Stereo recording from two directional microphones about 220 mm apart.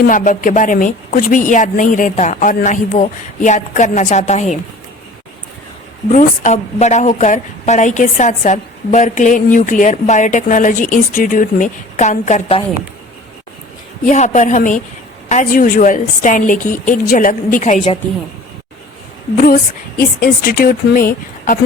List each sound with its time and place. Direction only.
0.0 s a woman's voice: 35° left (ahead or behind)
6.1 s a woman's voice: 35° left (ahead or behind)
14.0 s a woman's voice: 30° left (ahead or behind)
20.0 s a woman's voice: 40° left (ahead or behind)